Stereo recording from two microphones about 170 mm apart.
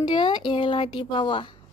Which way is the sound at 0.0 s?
25° left (ahead or behind).